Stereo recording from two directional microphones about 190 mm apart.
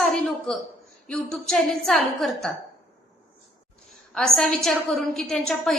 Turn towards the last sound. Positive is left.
turn(degrees=0)  # may be behind; listen again after turning